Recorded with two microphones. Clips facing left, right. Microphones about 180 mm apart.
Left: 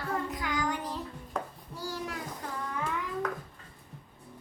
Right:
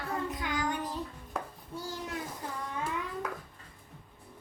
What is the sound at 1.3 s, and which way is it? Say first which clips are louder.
Hands: left 2 dB; 5° right (ahead or behind).